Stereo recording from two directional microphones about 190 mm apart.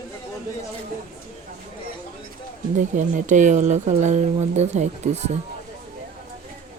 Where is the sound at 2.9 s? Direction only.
40° right (ahead or behind).